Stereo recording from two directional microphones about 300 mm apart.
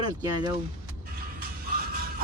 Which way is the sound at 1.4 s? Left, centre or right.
Right.